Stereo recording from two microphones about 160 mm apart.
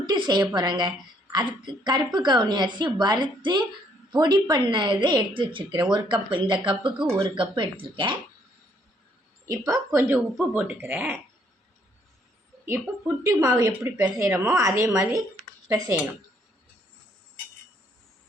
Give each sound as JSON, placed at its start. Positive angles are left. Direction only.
{"t": 0.0, "sound": "a woman's voice", "side_deg": -30}
{"t": 9.5, "sound": "a woman's voice", "side_deg": -20}
{"t": 13.2, "sound": "a woman's voice", "side_deg": -20}